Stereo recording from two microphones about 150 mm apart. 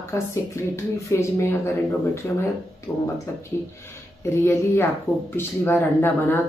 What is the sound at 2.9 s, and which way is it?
Speech, 15° left (ahead or behind).